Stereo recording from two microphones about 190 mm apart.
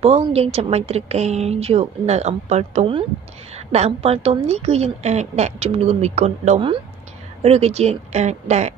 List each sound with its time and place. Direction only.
0.0 s a woman's voice: 30° right (ahead or behind)